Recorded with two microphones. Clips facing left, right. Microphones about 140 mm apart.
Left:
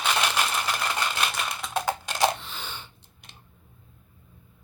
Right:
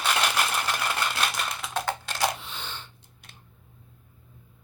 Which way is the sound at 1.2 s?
Centre (ahead or behind).